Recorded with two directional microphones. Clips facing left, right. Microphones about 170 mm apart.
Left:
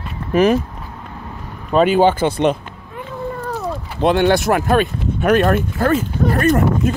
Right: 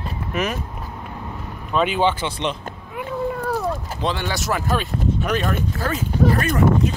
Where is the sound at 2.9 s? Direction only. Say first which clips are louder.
Right 1 dB; 10° right (ahead or behind).